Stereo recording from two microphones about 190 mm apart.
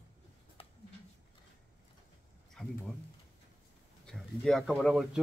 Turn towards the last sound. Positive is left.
turn(degrees=0)  # may be behind; listen again after turning